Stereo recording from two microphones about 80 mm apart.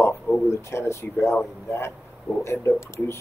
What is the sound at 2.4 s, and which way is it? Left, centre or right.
Speech, left.